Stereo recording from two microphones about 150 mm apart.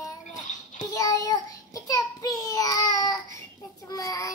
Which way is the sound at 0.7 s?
25° left (ahead or behind).